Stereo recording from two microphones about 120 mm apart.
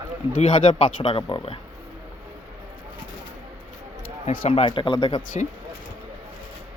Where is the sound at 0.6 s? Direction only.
70° left (ahead or behind).